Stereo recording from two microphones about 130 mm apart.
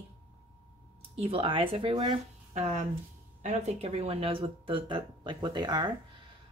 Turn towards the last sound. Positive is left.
turn(degrees=-35)  # may be behind; listen again after turning